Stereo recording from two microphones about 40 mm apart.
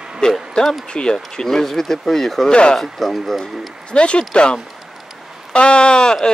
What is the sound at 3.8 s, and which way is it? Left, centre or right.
Speech, left.